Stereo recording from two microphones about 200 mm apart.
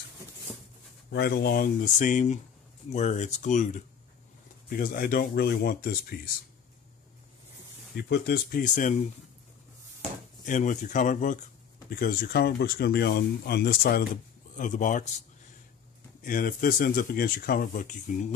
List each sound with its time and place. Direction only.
1.1 s speech: 55° left (ahead or behind); by 3.8 s 35° left (ahead or behind)
4.6 s speech: 45° left (ahead or behind)
7.9 s speech: 50° left (ahead or behind)
10.4 s speech: 40° left (ahead or behind)
16.2 s speech: 45° left (ahead or behind)